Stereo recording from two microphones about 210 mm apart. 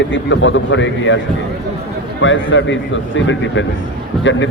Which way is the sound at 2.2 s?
60° left (ahead or behind).